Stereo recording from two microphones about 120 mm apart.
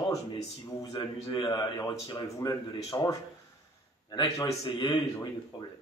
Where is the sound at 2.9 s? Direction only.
30° left (ahead or behind).